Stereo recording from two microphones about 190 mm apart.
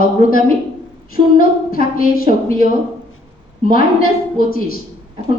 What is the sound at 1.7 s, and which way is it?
Speech, 50° left (ahead or behind).